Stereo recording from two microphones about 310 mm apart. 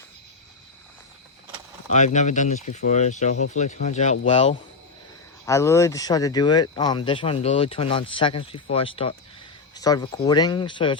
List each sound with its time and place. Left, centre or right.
1.9 s speech: left
5.5 s speech: centre